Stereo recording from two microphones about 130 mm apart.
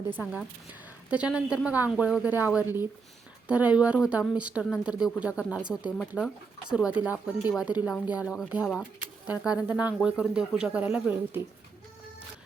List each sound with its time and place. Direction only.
0.7 s speech: 10° right (ahead or behind)